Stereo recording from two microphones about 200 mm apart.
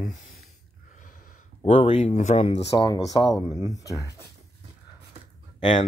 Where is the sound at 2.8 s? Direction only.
20° left (ahead or behind).